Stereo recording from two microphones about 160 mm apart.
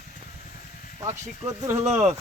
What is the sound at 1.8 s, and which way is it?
Speech, 45° right (ahead or behind).